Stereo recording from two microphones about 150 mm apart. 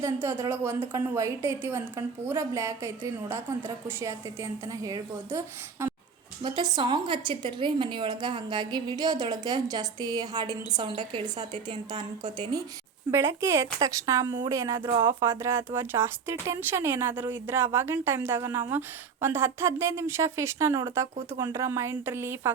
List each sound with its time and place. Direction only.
0.0 s a woman's voice: 15° right (ahead or behind)
5.8 s a sound: 15° right (ahead or behind)
6.4 s a woman's voice: 40° right (ahead or behind)
6.7 s a woman's voice: 30° right (ahead or behind)
13.1 s a woman's voice: 15° right (ahead or behind)
14.8 s a woman's voice: 30° right (ahead or behind)
15.2 s speech: 20° right (ahead or behind)